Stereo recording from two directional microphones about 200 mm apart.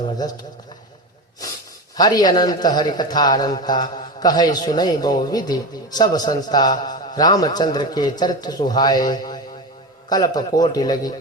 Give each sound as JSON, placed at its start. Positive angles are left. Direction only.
{"t": 0.0, "sound": "a man's voice", "side_deg": 20}
{"t": 2.0, "sound": "a man's voice", "side_deg": 20}